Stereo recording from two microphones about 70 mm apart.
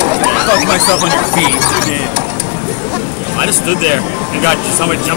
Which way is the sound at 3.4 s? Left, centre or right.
Left.